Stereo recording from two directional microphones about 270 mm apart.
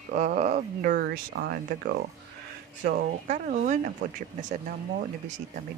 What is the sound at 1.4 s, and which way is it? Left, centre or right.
Speech, right.